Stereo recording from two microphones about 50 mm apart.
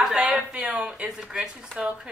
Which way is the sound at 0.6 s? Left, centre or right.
Centre.